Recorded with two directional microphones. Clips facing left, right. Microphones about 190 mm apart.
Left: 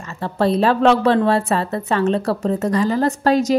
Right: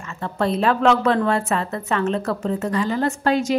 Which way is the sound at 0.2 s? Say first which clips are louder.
Left 4 dB; 35° left (ahead or behind).